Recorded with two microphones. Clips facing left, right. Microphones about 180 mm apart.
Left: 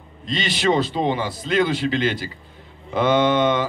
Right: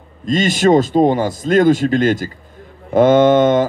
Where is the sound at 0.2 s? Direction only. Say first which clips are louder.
Right 9 dB; 45° right (ahead or behind).